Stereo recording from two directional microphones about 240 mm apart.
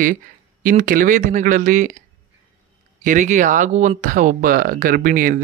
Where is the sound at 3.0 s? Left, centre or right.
Right.